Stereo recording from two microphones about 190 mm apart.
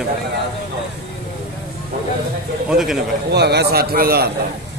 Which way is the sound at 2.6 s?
5° right (ahead or behind).